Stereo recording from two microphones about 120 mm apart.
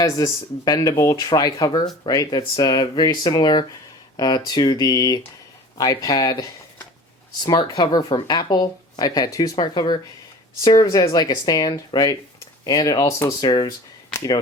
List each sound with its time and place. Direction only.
0.0 s speech: 30° left (ahead or behind)
7.4 s speech: 40° left (ahead or behind)